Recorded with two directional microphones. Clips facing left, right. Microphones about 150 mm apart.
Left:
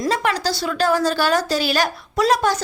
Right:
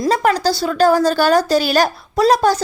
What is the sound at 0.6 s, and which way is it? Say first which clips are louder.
A woman's voice: right 5 dB; 40° right (ahead or behind).